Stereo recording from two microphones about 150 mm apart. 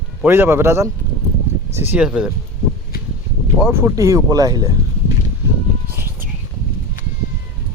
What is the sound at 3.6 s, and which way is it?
Speech, 15° right (ahead or behind).